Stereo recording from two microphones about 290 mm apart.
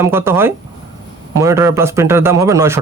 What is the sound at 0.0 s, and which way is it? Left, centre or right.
A man's voice, centre.